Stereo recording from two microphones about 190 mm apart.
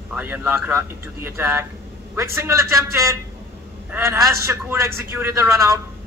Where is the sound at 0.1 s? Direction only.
10° right (ahead or behind).